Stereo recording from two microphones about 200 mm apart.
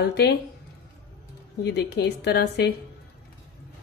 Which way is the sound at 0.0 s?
55° left (ahead or behind).